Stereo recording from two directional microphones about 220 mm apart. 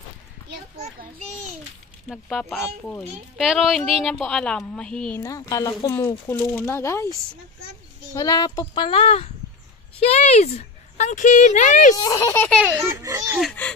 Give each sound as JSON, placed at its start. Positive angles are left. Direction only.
{"t": 2.0, "sound": "a woman's voice", "side_deg": 0}
{"t": 3.3, "sound": "a woman's voice", "side_deg": 0}
{"t": 5.2, "sound": "a child's voice", "side_deg": 15}
{"t": 12.0, "sound": "speech", "side_deg": 15}
{"t": 12.6, "sound": "speech", "side_deg": -10}
{"t": 13.4, "sound": "a woman's voice", "side_deg": 5}